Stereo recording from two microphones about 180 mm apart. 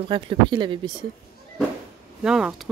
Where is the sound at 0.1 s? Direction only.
25° right (ahead or behind).